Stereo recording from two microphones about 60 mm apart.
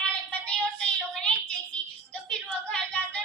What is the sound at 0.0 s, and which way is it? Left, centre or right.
Child singing, left.